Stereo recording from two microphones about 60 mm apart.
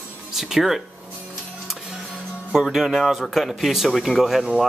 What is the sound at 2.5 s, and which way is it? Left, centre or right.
Speech, centre.